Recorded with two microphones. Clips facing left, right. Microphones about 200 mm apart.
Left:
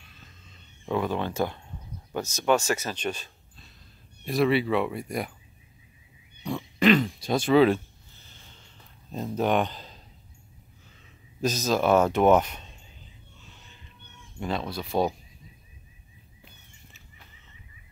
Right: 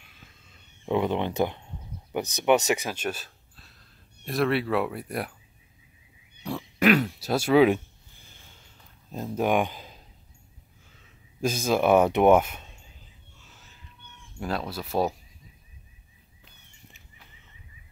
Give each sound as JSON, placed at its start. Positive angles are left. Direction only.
{"t": 0.0, "sound": "a sound", "side_deg": -10}
{"t": 0.9, "sound": "speech", "side_deg": -20}
{"t": 6.4, "sound": "throat clearing", "side_deg": -5}
{"t": 9.1, "sound": "speech", "side_deg": -5}
{"t": 11.4, "sound": "speech", "side_deg": -10}
{"t": 13.5, "sound": "a sound", "side_deg": -5}
{"t": 14.4, "sound": "speech", "side_deg": -5}